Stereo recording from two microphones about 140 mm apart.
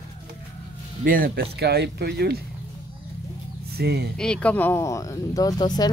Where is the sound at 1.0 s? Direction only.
90° right.